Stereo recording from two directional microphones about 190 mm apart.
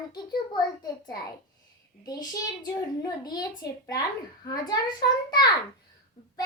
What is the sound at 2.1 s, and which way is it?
Speech, 20° left (ahead or behind).